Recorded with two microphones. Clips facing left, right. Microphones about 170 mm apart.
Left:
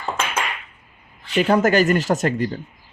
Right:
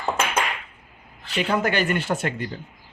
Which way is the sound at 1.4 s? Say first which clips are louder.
Left 6 dB; 40° left (ahead or behind).